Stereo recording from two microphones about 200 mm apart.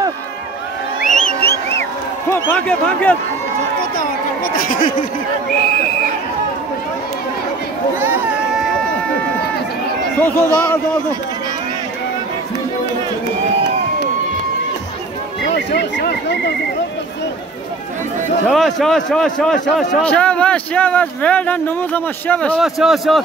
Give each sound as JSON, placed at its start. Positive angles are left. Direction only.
{"t": 1.1, "sound": "a sound", "side_deg": 5}
{"t": 2.2, "sound": "speech", "side_deg": 10}
{"t": 4.6, "sound": "speech", "side_deg": 45}
{"t": 8.0, "sound": "a sound", "side_deg": -10}
{"t": 10.2, "sound": "speech", "side_deg": 10}
{"t": 15.4, "sound": "speech", "side_deg": 55}
{"t": 18.5, "sound": "a man's voice", "side_deg": 0}